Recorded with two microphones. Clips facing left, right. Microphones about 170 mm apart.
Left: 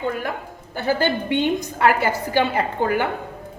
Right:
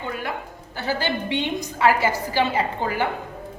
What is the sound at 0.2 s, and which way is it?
A woman's voice, 45° left (ahead or behind).